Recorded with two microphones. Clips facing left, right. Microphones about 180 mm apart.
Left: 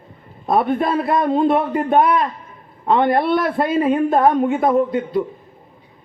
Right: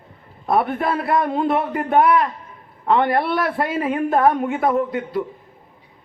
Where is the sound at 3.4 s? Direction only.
5° right (ahead or behind).